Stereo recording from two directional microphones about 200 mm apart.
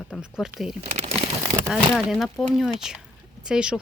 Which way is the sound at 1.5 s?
15° right (ahead or behind).